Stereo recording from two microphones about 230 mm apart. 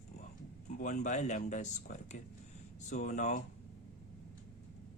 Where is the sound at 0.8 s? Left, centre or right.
Left.